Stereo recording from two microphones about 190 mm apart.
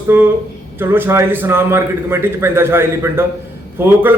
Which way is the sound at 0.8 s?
10° right (ahead or behind).